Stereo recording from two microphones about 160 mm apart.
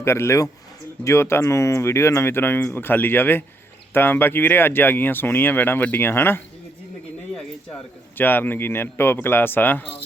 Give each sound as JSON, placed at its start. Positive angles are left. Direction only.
{"t": 0.0, "sound": "speech", "side_deg": 15}
{"t": 8.2, "sound": "speech", "side_deg": 10}